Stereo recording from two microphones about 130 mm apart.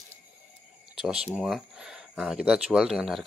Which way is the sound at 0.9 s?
5° right (ahead or behind).